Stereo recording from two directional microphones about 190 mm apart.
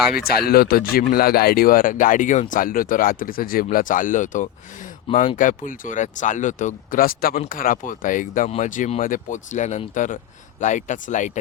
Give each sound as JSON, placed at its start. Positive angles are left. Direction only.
{"t": 0.1, "sound": "speech", "side_deg": 50}